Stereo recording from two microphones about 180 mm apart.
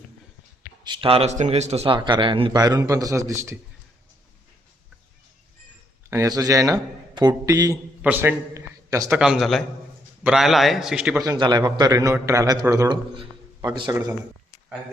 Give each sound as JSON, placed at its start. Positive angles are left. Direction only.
{"t": 0.9, "sound": "a man's voice", "side_deg": -30}
{"t": 6.1, "sound": "a man's voice", "side_deg": -20}
{"t": 9.1, "sound": "a man's voice", "side_deg": -5}
{"t": 11.2, "sound": "a man's voice", "side_deg": -20}